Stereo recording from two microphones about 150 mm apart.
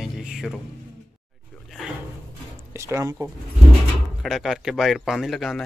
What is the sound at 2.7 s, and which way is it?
Speech, 20° right (ahead or behind).